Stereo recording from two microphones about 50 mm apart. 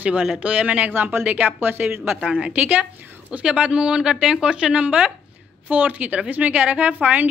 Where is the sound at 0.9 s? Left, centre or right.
Right.